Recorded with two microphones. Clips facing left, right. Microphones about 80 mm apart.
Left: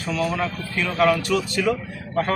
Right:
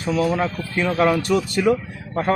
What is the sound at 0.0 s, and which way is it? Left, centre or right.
A man's voice, right.